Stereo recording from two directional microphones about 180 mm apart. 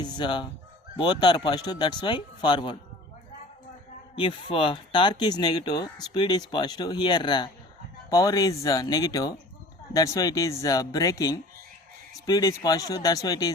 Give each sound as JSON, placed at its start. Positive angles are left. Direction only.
{"t": 0.0, "sound": "speech", "side_deg": 25}
{"t": 4.1, "sound": "speech", "side_deg": 30}